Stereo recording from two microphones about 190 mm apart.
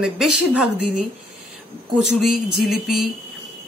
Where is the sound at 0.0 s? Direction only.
5° right (ahead or behind).